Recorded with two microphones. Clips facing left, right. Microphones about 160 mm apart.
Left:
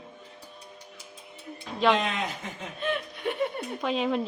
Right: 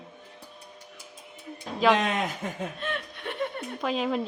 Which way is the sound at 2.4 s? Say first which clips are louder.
Right 5 dB; 50° right (ahead or behind).